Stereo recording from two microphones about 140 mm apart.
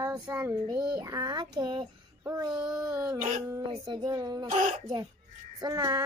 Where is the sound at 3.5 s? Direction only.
30° right (ahead or behind).